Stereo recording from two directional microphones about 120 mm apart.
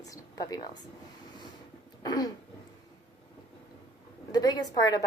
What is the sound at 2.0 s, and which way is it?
Throat clearing, 35° left (ahead or behind).